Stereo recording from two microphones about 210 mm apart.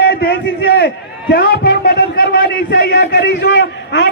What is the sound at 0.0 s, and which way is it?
Speech, 50° left (ahead or behind).